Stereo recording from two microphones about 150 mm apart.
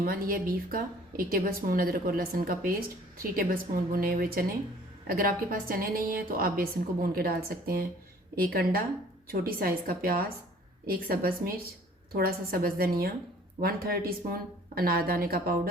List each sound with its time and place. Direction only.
0.0 s a woman's voice: 70° right (ahead or behind)
8.4 s a woman's voice: 90° right
9.2 s a woman's voice: 75° right (ahead or behind)